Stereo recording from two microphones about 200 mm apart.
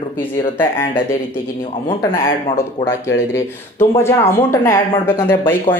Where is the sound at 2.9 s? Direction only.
15° left (ahead or behind).